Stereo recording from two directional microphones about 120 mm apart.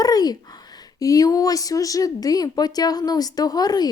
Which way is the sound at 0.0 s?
30° left (ahead or behind).